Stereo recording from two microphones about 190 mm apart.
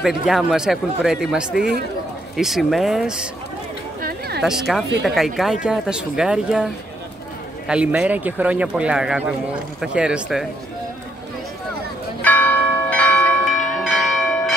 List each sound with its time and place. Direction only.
0.0 s speech: centre (ahead or behind)
4.4 s speech: centre (ahead or behind)
12.2 s church bell: 10° left (ahead or behind)